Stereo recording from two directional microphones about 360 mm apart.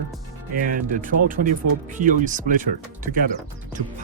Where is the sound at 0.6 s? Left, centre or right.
Right.